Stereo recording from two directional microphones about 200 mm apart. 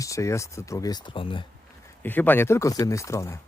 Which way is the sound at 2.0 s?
10° left (ahead or behind).